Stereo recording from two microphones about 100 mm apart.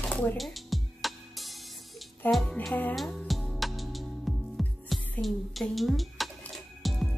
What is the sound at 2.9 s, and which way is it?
Music, centre (ahead or behind).